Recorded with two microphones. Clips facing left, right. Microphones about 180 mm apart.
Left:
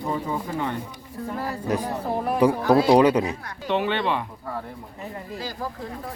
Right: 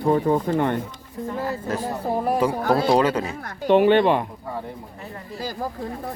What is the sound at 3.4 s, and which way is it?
Speech, 50° right (ahead or behind).